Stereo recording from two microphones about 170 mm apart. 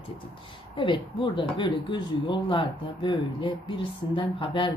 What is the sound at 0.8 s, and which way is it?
Speech, 30° left (ahead or behind).